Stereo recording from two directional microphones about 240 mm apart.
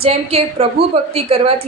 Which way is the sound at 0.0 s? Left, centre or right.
Right.